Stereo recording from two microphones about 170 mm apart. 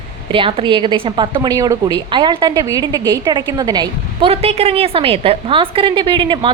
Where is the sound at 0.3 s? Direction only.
30° right (ahead or behind).